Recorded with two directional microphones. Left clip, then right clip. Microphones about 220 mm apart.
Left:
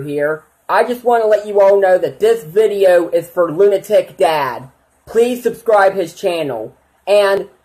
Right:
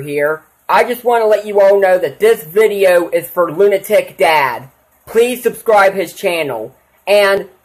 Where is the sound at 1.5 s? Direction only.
5° right (ahead or behind).